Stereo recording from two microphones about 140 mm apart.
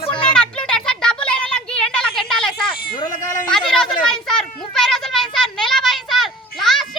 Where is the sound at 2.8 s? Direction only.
85° left; by 3.4 s 70° left (ahead or behind).